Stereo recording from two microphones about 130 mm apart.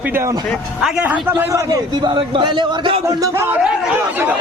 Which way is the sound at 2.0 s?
40° right (ahead or behind).